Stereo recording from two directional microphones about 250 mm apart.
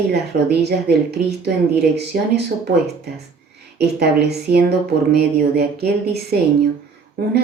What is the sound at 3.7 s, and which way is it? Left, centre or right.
Speech, right.